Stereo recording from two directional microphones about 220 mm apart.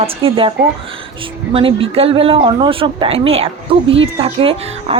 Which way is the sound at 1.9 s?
25° right (ahead or behind).